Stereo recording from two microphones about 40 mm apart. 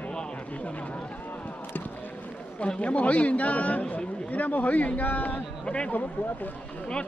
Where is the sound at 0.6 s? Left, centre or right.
Left.